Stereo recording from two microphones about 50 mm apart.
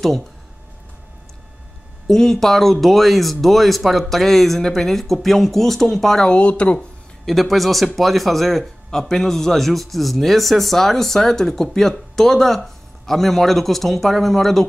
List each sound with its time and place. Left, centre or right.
2.0 s speech: centre
6.2 s speech: left
7.2 s speech: centre